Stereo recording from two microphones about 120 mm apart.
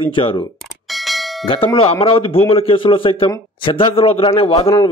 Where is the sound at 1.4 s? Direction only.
50° left (ahead or behind).